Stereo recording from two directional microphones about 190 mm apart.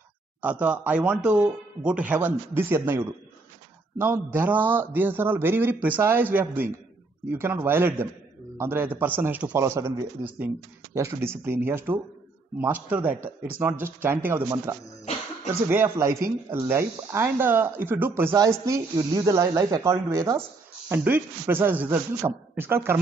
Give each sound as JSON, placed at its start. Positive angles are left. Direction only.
{"t": 0.4, "sound": "speech", "side_deg": -5}